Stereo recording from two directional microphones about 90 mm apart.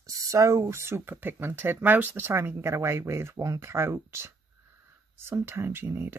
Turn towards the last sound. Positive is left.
turn(degrees=-25)  # may be behind; listen again after turning